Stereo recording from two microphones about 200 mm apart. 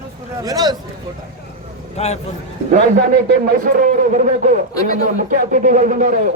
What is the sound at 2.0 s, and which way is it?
Speech, 30° left (ahead or behind).